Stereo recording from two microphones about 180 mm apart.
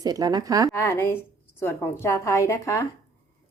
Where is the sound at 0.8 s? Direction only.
15° left (ahead or behind).